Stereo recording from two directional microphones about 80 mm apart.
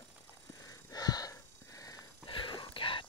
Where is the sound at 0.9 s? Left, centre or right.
Left.